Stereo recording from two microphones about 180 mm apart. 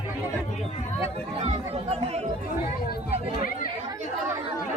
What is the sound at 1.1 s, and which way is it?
Speech, 35° right (ahead or behind).